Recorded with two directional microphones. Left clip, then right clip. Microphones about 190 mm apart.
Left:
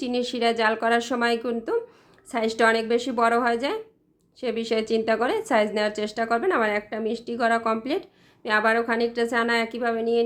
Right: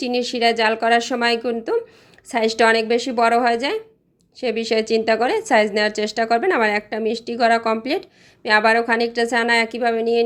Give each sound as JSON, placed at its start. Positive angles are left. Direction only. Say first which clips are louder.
{"t": 0.0, "sound": "a woman's voice", "louder": "right 5 dB", "side_deg": -5}